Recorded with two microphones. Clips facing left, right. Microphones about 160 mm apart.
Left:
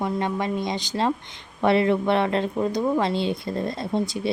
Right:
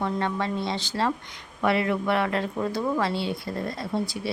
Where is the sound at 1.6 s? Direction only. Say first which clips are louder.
Left 4 dB; 25° left (ahead or behind).